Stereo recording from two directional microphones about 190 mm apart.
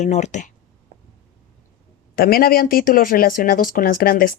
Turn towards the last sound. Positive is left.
turn(degrees=45)  # may be behind; listen again after turning